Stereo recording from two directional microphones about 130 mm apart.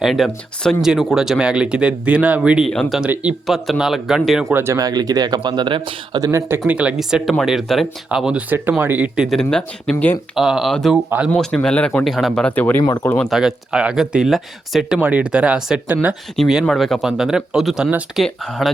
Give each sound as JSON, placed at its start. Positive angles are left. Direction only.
{"t": 0.0, "sound": "speech", "side_deg": 0}
{"t": 4.5, "sound": "speech", "side_deg": -20}
{"t": 6.2, "sound": "speech", "side_deg": -20}
{"t": 6.7, "sound": "speech", "side_deg": -10}
{"t": 9.9, "sound": "speech", "side_deg": 15}
{"t": 10.3, "sound": "speech", "side_deg": -5}
{"t": 13.1, "sound": "speech", "side_deg": 0}